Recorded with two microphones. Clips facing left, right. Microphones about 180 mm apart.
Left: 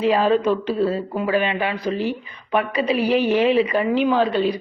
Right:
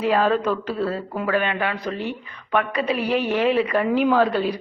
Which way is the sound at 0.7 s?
15° left (ahead or behind).